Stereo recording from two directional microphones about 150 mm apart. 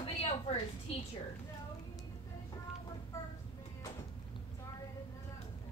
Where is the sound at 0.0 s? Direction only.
40° left (ahead or behind).